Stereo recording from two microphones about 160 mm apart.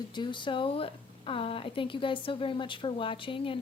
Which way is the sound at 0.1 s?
30° left (ahead or behind).